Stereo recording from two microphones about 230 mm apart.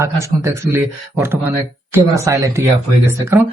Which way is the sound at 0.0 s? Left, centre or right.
Centre.